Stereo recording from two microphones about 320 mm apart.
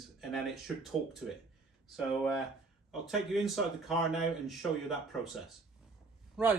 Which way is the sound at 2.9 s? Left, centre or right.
Centre.